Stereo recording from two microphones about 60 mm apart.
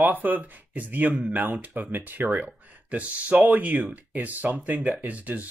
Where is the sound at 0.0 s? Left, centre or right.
Right.